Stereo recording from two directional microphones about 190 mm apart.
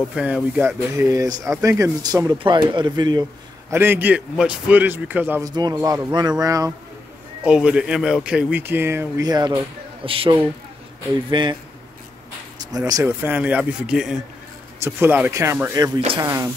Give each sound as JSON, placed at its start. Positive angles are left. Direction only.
{"t": 0.1, "sound": "speech", "side_deg": -5}
{"t": 3.7, "sound": "speech", "side_deg": -10}
{"t": 5.5, "sound": "speech", "side_deg": -20}
{"t": 7.4, "sound": "speech", "side_deg": -5}
{"t": 12.7, "sound": "speech", "side_deg": -20}